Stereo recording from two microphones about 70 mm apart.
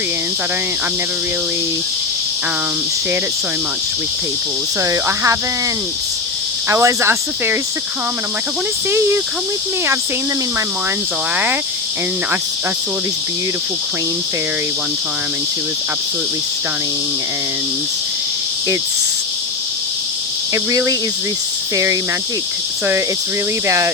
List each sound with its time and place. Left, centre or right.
4.8 s speech: right
6.7 s speech: right
8.9 s speech: right
20.5 s speech: right
23.6 s speech: right